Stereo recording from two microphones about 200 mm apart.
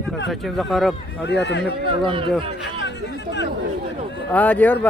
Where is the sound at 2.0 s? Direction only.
25° right (ahead or behind).